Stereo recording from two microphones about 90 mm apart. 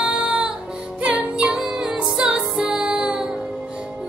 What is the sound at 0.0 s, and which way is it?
Music, 10° right (ahead or behind).